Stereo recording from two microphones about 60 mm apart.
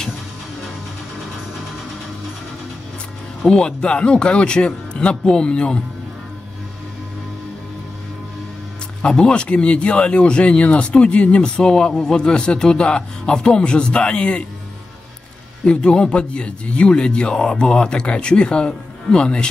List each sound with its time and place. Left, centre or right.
3.4 s speech: centre
9.0 s speech: centre
15.6 s speech: centre